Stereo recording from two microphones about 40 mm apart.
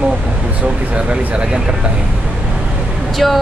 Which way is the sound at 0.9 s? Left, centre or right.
Right.